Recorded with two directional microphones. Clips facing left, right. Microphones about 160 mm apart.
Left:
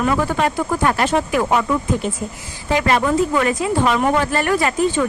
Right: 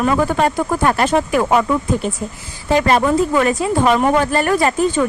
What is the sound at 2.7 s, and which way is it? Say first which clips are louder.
A woman's voice: right 3 dB; 40° right (ahead or behind).